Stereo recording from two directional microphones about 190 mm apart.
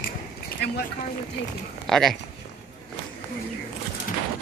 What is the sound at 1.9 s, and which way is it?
Speech, centre (ahead or behind).